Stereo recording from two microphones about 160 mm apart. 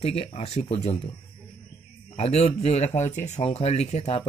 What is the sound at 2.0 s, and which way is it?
Speech, 40° left (ahead or behind).